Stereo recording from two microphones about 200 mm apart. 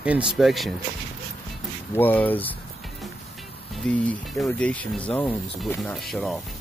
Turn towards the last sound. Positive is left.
turn(degrees=0)  # may be behind; listen again after turning